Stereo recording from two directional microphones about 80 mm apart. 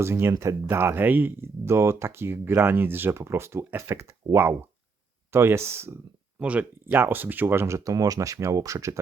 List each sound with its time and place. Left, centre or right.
0.0 s speech: right
1.6 s speech: right
6.4 s speech: centre
7.9 s speech: right